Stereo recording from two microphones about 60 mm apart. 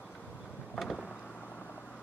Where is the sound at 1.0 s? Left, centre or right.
Centre.